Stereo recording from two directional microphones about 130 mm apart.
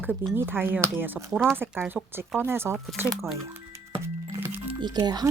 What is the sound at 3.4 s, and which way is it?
Music, 20° right (ahead or behind).